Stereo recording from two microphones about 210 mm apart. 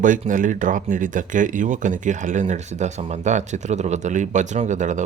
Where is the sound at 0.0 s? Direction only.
40° right (ahead or behind).